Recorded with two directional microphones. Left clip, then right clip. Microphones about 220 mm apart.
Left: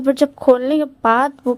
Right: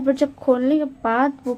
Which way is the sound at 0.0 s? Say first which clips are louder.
Left 5 dB; 45° left (ahead or behind).